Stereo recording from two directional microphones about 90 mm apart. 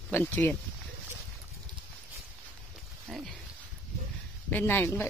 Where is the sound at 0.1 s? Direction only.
20° left (ahead or behind).